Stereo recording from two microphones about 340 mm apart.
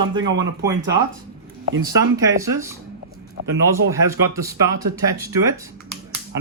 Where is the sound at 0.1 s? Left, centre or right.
Centre.